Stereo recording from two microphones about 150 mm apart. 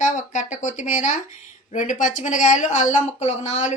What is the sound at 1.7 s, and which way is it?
Speech, 60° left (ahead or behind).